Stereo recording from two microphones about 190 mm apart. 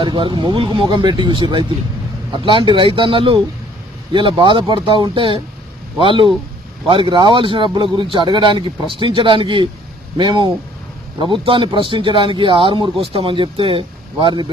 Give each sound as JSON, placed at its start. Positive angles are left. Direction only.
{"t": 0.0, "sound": "speech", "side_deg": -25}